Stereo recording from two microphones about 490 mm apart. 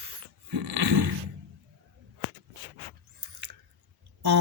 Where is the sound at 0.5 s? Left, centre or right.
Right.